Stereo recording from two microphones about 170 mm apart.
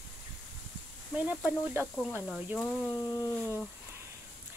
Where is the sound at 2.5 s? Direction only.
10° left (ahead or behind).